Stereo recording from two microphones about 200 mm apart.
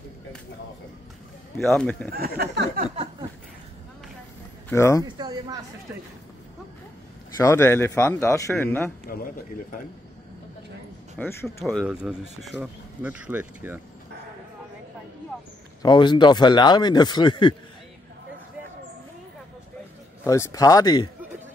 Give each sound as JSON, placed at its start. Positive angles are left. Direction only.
{"t": 1.6, "sound": "speech", "side_deg": 5}
{"t": 2.0, "sound": "speech", "side_deg": -50}
{"t": 2.8, "sound": "a sound", "side_deg": -30}
{"t": 4.6, "sound": "a man's voice", "side_deg": 15}
{"t": 5.0, "sound": "speech", "side_deg": -20}
{"t": 7.3, "sound": "a man's voice", "side_deg": 15}
{"t": 9.0, "sound": "speech", "side_deg": 45}
{"t": 11.4, "sound": "speech", "side_deg": 0}
{"t": 15.8, "sound": "speech", "side_deg": 20}
{"t": 20.2, "sound": "a man's voice", "side_deg": 15}